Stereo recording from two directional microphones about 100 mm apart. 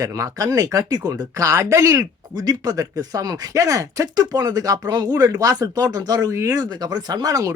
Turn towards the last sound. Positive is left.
turn(degrees=-35)  # may be behind; listen again after turning